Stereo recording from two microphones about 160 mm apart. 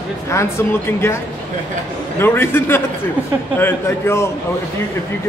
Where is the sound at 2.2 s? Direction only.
15° left (ahead or behind).